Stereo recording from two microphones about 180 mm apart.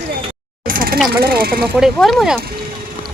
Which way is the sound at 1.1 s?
55° right (ahead or behind).